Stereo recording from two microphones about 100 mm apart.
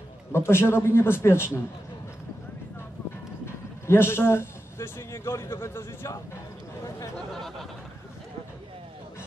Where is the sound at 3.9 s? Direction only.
25° left (ahead or behind).